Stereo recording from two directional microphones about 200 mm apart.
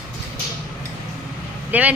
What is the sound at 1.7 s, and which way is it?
Speech, 10° right (ahead or behind).